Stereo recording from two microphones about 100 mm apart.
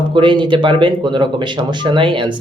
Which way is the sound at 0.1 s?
55° right (ahead or behind).